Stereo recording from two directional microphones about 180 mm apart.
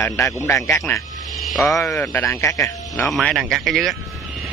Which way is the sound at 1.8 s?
15° left (ahead or behind).